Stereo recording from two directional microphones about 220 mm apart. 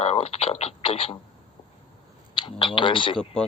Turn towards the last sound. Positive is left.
turn(degrees=5)  # may be behind; listen again after turning